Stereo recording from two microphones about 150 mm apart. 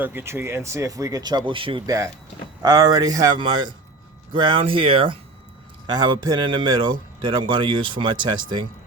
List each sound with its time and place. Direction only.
0.0 s speech: 15° right (ahead or behind); by 8.6 s 30° right (ahead or behind)